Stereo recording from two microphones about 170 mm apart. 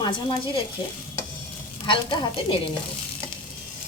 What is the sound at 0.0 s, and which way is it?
Speech, 30° left (ahead or behind).